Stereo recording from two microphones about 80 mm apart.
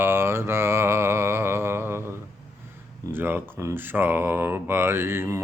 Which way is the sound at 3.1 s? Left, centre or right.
Right.